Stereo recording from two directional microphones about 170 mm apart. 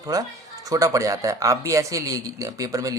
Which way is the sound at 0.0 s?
20° right (ahead or behind).